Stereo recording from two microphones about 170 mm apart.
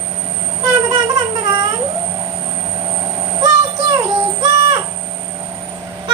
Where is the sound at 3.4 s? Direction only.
25° right (ahead or behind).